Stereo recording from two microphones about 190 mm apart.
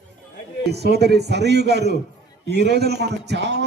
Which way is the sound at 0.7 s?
60° right (ahead or behind).